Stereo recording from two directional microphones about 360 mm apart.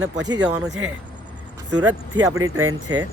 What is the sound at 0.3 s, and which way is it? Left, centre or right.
Speech, centre.